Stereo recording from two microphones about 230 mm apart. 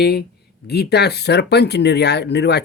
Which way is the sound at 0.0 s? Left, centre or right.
Left.